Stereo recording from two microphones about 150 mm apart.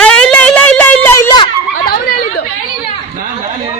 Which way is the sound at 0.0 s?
5° left (ahead or behind).